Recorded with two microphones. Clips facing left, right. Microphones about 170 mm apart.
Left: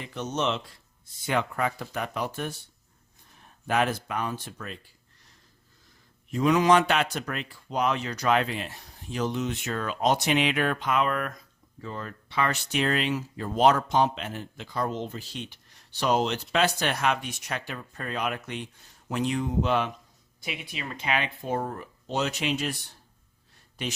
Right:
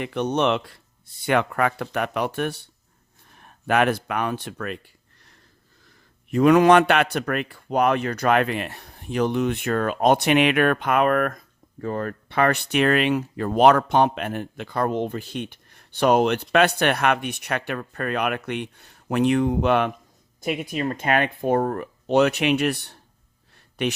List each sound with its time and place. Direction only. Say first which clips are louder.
0.0 s a man's voice: right 7 dB; 65° right (ahead or behind)
6.3 s a man's voice: right 6 dB; 60° right (ahead or behind)
20.4 s a man's voice: right 11 dB; 45° right (ahead or behind); by 23.9 s 65° right (ahead or behind)